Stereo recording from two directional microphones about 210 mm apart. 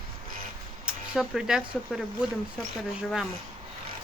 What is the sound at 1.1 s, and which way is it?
Speech, 5° right (ahead or behind).